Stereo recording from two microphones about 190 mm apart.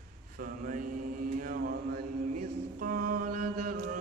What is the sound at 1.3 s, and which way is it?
Mantra, 50° right (ahead or behind).